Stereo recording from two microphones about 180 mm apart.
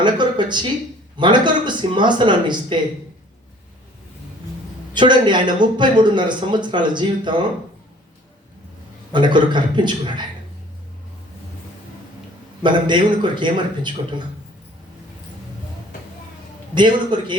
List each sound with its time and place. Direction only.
0.0 s speech: 25° right (ahead or behind)
4.9 s speech: 25° right (ahead or behind)
9.1 s speech: 25° right (ahead or behind)
12.6 s speech: 25° right (ahead or behind)
16.7 s speech: 25° right (ahead or behind)